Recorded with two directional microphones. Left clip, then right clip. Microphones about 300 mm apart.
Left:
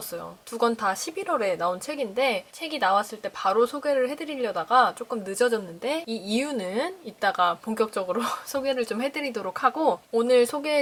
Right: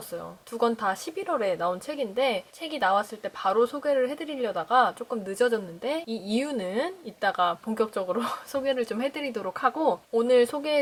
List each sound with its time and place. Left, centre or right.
0.6 s a woman's voice: centre
9.7 s speech: centre
10.2 s a woman's voice: centre